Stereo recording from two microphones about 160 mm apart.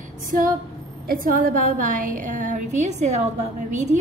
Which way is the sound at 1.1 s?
60° right (ahead or behind).